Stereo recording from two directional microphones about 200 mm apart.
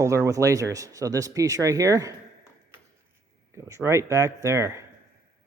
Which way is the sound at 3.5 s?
15° right (ahead or behind).